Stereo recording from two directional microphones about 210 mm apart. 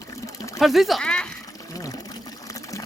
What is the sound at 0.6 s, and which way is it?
Speech, centre (ahead or behind).